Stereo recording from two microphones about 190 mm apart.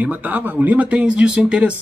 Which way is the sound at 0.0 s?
10° right (ahead or behind).